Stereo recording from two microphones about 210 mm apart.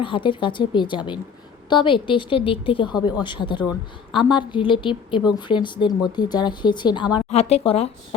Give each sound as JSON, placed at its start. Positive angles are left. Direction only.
{"t": 0.0, "sound": "a woman's voice", "side_deg": 25}